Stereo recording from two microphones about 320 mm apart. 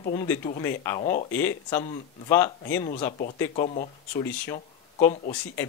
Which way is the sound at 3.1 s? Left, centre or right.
Left.